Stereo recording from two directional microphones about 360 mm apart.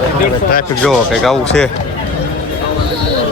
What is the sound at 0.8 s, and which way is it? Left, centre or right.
Speech, centre.